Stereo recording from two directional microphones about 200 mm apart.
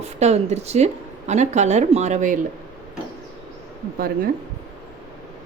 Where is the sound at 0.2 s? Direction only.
35° right (ahead or behind).